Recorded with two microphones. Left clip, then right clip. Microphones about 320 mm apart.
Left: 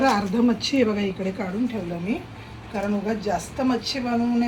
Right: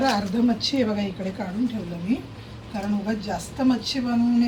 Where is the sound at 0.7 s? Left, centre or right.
Centre.